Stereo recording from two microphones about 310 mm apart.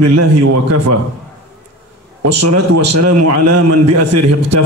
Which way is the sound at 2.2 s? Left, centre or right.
Right.